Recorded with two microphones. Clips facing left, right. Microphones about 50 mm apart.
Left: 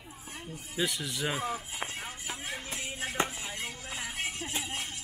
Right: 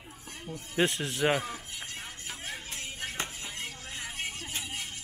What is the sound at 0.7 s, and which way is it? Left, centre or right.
Speech, right.